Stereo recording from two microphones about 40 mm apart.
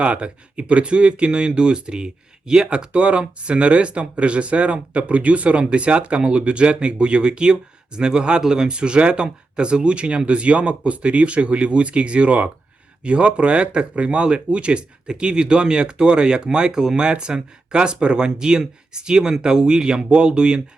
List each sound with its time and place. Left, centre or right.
0.0 s speech: right